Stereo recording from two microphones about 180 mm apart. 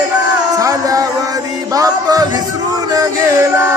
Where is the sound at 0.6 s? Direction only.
20° right (ahead or behind).